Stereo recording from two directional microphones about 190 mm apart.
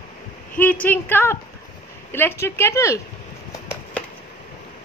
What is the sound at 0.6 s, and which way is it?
A man's voice, 10° left (ahead or behind).